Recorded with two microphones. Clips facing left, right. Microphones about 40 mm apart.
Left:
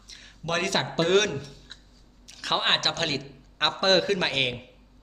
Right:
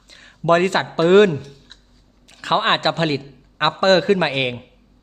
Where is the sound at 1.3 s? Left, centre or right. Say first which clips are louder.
Right 6 dB; centre.